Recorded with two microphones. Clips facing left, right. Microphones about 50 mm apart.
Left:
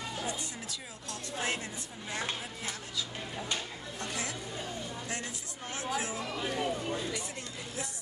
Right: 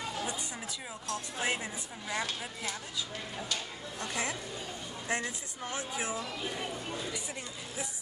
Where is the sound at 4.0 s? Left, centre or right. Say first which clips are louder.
Right 3 dB; right.